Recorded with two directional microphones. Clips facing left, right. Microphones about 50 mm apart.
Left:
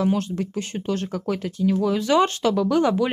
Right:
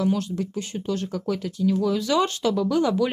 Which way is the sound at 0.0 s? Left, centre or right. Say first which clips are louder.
Left 1 dB; left.